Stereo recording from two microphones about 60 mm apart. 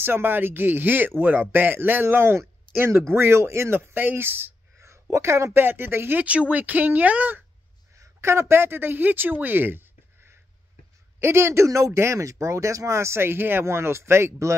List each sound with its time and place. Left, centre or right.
0.0 s speech: right
6.2 s speech: right
8.0 s a woman's voice: right